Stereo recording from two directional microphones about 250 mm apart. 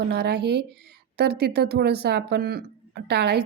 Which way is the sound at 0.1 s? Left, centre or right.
Right.